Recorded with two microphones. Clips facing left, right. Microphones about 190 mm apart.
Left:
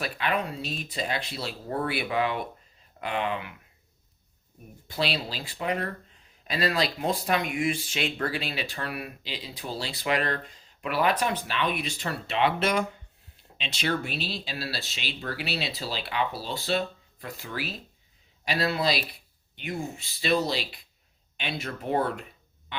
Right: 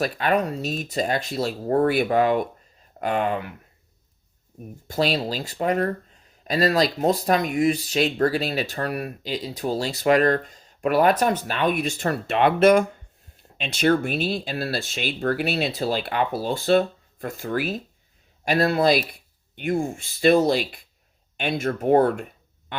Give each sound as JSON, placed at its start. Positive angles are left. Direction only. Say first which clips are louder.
{"t": 0.0, "sound": "speech", "louder": "right 7 dB", "side_deg": -45}
{"t": 4.9, "sound": "speech", "louder": "right 7 dB", "side_deg": -45}